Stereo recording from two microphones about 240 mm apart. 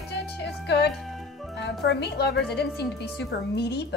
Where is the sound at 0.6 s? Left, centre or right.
Left.